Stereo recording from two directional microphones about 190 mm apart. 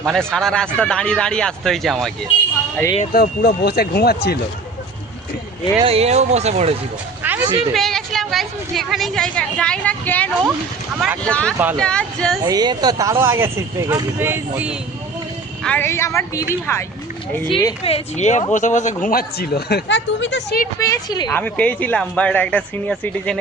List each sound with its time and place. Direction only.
0.0 s a woman's voice: centre (ahead or behind)
3.0 s speech: 50° left (ahead or behind)
5.8 s speech: 30° right (ahead or behind)
7.2 s music: 10° right (ahead or behind)
7.7 s a woman's voice: centre (ahead or behind)
11.5 s speech: 10° right (ahead or behind)
11.8 s a woman's voice: 5° left (ahead or behind)
12.5 s speech: 20° right (ahead or behind)
15.6 s speech: 10° left (ahead or behind)
17.8 s speech: 35° left (ahead or behind)
19.0 s speech: 55° left (ahead or behind); by 20.6 s 70° left (ahead or behind)
20.7 s speech: 15° left (ahead or behind)
21.2 s speech: 5° left (ahead or behind)